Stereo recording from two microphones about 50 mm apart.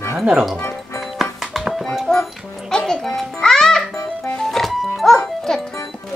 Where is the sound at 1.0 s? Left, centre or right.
Centre.